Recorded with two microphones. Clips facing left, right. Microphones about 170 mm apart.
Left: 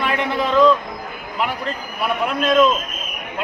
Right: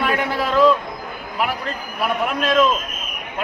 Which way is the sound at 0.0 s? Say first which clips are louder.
Even; 5° right (ahead or behind).